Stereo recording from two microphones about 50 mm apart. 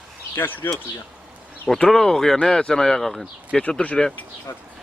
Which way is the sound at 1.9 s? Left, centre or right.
Centre.